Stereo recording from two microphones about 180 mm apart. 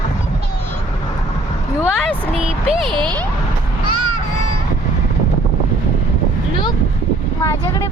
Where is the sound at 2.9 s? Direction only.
25° right (ahead or behind).